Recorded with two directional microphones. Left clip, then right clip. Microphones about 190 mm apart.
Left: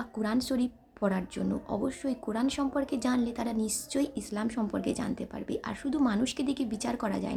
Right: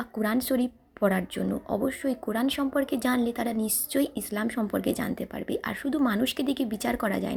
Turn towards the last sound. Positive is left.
turn(degrees=-20)  # may be behind; listen again after turning